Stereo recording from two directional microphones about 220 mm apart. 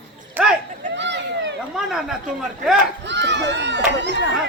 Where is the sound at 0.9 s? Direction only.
50° right (ahead or behind).